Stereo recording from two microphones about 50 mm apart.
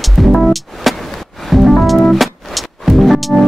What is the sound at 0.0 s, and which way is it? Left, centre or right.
Music, centre.